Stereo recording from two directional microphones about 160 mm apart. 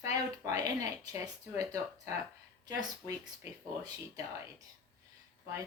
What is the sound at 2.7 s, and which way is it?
Speech, 20° right (ahead or behind).